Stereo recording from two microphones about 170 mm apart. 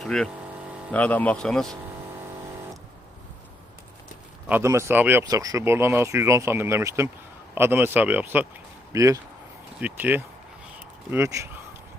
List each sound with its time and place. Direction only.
0.0 s speech: 5° left (ahead or behind)
4.4 s speech: 15° right (ahead or behind)